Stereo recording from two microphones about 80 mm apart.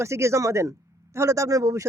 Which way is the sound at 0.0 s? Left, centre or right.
Right.